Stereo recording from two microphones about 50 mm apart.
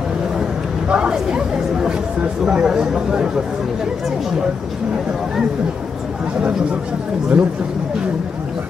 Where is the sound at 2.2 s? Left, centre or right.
Right.